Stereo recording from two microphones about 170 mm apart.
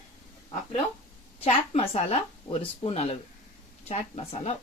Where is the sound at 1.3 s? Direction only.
40° left (ahead or behind).